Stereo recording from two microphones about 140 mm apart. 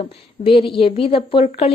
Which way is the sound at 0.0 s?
40° left (ahead or behind).